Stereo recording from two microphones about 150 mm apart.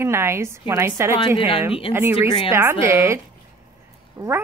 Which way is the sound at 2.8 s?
20° right (ahead or behind).